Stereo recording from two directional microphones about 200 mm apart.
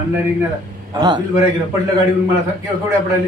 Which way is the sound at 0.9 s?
20° right (ahead or behind).